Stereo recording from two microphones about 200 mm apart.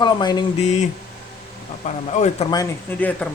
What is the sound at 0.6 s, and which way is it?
Speech, 35° left (ahead or behind).